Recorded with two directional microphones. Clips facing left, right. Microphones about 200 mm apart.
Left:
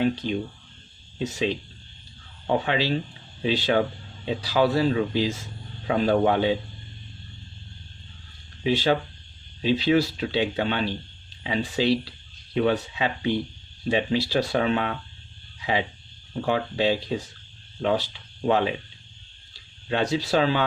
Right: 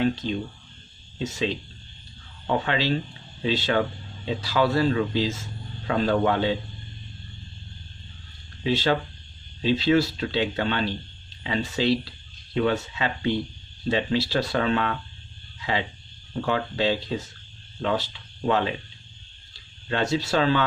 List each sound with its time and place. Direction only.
0.0 s speech: 15° left (ahead or behind)
2.4 s speech: 15° left (ahead or behind)
8.6 s speech: 15° left (ahead or behind)
16.3 s speech: 15° left (ahead or behind)
19.9 s speech: 15° left (ahead or behind)